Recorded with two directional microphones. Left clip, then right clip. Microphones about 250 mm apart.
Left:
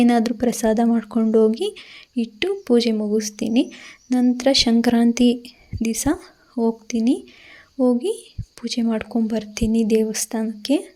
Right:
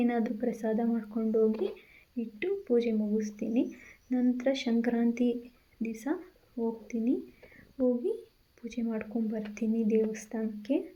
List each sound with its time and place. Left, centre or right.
0.0 s speech: left
8.6 s speech: left